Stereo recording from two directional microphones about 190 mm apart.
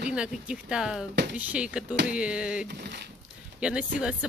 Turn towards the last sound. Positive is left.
turn(degrees=-5)  # may be behind; listen again after turning